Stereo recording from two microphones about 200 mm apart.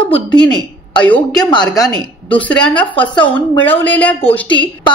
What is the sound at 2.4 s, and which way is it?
A woman's voice, 5° left (ahead or behind).